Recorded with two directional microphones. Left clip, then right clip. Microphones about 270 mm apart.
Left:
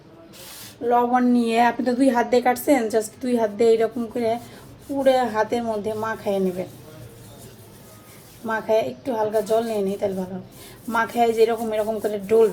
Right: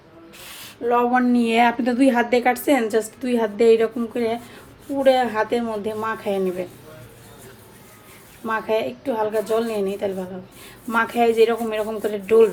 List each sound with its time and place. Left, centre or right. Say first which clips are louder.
0.9 s speech: even; right
1.5 s a woman's voice: right 1 dB; right
8.4 s a woman's voice: left 1 dB; right